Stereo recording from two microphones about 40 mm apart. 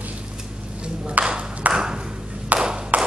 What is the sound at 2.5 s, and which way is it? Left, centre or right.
Ping, right.